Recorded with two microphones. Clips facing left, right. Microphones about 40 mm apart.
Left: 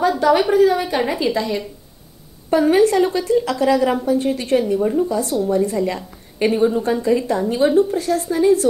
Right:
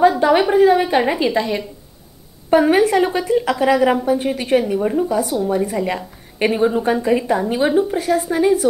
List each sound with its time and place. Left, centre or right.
0.2 s a woman's voice: right